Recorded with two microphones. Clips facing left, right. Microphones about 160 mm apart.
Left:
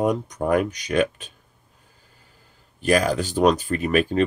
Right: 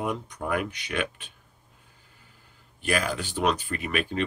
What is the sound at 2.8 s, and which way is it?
Speech, 40° left (ahead or behind).